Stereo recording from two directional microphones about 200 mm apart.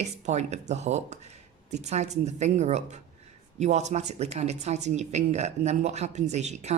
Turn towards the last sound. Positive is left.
turn(degrees=-35)  # may be behind; listen again after turning